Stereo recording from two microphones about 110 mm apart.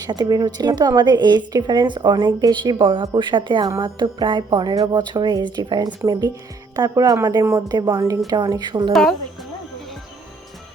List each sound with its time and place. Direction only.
0.0 s a woman's voice: 40° right (ahead or behind)
8.9 s speech: 5° left (ahead or behind)